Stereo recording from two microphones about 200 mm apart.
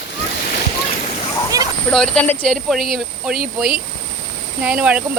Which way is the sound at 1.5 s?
15° right (ahead or behind).